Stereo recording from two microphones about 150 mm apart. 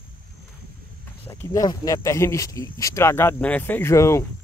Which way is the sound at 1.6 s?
20° left (ahead or behind).